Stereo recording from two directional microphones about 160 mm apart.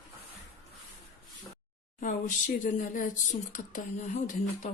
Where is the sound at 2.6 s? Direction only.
55° left (ahead or behind).